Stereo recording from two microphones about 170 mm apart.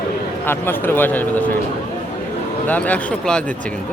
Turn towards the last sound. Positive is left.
turn(degrees=5)  # may be behind; listen again after turning